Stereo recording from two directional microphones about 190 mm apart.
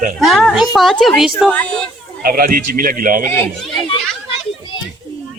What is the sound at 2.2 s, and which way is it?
A man's voice, 50° right (ahead or behind).